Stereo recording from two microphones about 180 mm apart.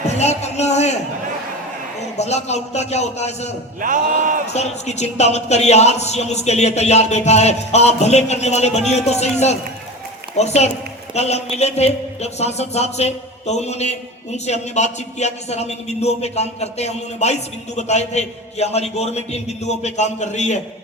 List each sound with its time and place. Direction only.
0.2 s speech: 40° left (ahead or behind)
2.1 s speech: 35° left (ahead or behind)
3.8 s a sound: 45° right (ahead or behind)
4.5 s speech: 35° left (ahead or behind)